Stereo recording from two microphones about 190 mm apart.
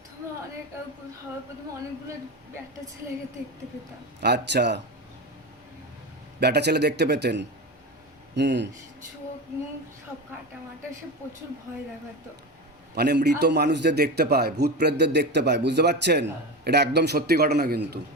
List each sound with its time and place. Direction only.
4.2 s a man's voice: 60° right (ahead or behind)
6.4 s a man's voice: 60° right (ahead or behind)
12.9 s a man's voice: 60° right (ahead or behind)